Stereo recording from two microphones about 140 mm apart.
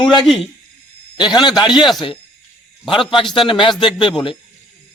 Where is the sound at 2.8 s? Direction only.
35° left (ahead or behind).